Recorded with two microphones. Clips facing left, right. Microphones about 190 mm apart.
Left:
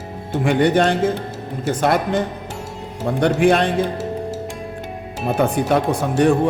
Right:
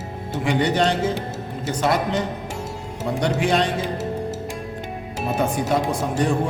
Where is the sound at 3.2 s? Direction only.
55° left (ahead or behind).